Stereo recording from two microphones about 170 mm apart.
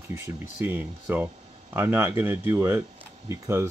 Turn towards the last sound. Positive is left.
turn(degrees=-15)  # may be behind; listen again after turning